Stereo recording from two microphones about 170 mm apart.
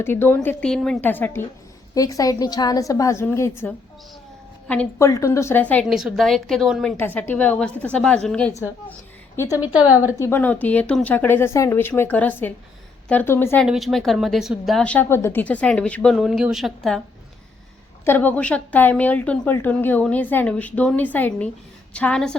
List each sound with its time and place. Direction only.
0.0 s a woman's voice: 15° left (ahead or behind)
5.9 s speech: centre (ahead or behind)
6.9 s a woman's voice: 10° left (ahead or behind)
13.7 s speech: centre (ahead or behind)
18.0 s a woman's voice: 10° left (ahead or behind)